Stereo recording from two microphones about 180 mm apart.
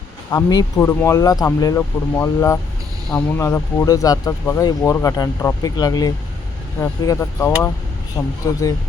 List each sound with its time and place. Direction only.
0.3 s speech: 15° left (ahead or behind)